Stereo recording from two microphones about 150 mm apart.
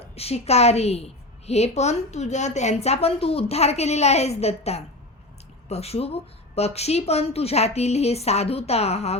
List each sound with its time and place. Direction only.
0.0 s speech: 45° left (ahead or behind)